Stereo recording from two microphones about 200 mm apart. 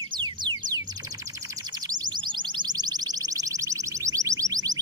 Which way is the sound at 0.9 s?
20° right (ahead or behind).